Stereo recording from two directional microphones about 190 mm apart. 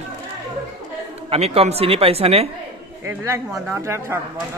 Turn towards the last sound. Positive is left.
turn(degrees=-15)  # may be behind; listen again after turning